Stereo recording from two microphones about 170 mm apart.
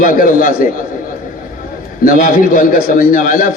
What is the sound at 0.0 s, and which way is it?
Speech, 55° left (ahead or behind).